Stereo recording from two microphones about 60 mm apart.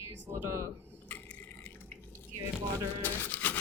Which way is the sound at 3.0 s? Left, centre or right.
Left.